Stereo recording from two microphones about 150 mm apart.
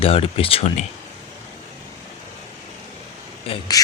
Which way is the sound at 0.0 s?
40° left (ahead or behind).